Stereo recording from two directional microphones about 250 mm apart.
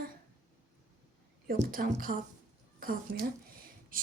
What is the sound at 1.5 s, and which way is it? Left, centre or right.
A woman's voice, right.